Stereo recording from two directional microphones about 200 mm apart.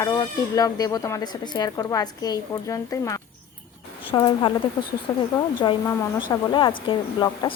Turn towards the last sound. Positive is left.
turn(degrees=25)  # may be behind; listen again after turning